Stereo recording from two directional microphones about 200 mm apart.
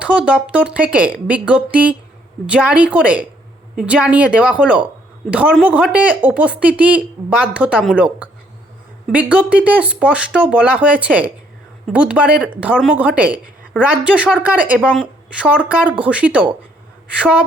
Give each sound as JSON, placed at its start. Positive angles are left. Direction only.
{"t": 0.0, "sound": "a woman's voice", "side_deg": -5}